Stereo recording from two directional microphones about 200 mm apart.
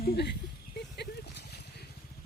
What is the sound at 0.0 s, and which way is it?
Speech, 55° left (ahead or behind).